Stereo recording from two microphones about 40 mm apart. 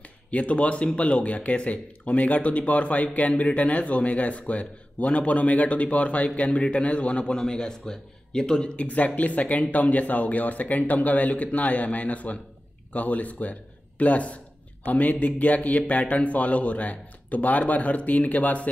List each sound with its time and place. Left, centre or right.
0.3 s a man's voice: left
8.8 s a man's voice: left